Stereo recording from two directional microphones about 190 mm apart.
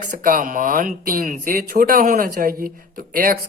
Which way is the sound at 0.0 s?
45° right (ahead or behind).